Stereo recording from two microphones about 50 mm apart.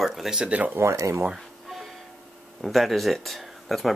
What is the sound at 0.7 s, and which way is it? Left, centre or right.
Speech, right.